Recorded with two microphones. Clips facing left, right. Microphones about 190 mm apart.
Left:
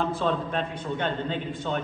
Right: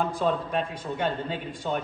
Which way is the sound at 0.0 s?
10° right (ahead or behind).